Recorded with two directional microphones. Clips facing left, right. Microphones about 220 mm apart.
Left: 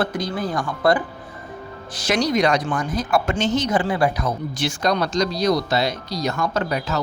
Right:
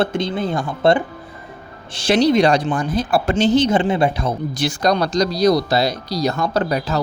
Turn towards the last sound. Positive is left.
turn(degrees=-35)  # may be behind; listen again after turning